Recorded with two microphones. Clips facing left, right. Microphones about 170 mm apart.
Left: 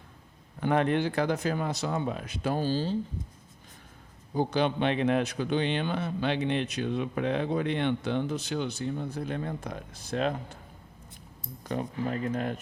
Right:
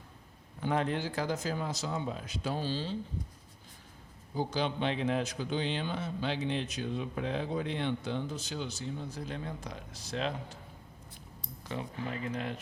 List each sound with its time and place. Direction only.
0.6 s a man's voice: 65° left (ahead or behind); by 3.0 s 45° left (ahead or behind)
4.4 s a man's voice: 60° left (ahead or behind)
11.6 s speech: 45° left (ahead or behind)